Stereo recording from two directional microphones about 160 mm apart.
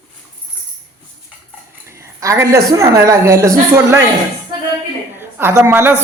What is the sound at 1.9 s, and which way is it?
A woman's voice, 20° right (ahead or behind).